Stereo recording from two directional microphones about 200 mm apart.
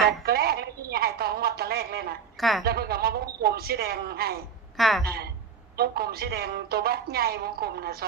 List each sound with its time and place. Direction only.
0.0 s telephone: 50° right (ahead or behind)
2.4 s a woman's voice: centre (ahead or behind)
2.6 s a woman's voice: 50° right (ahead or behind)
4.8 s a woman's voice: centre (ahead or behind)
5.0 s a woman's voice: 50° right (ahead or behind)